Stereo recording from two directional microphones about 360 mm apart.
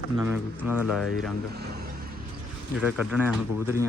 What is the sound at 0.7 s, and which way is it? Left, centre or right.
Speech, centre.